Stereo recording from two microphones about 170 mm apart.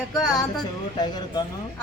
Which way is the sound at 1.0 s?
25° left (ahead or behind).